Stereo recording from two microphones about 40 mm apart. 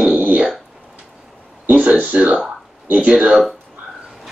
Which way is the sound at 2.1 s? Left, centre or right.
Right.